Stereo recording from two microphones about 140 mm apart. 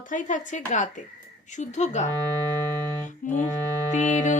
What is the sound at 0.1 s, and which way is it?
Speech, 65° left (ahead or behind).